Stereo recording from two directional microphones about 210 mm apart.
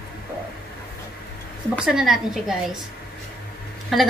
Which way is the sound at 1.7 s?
Centre (ahead or behind).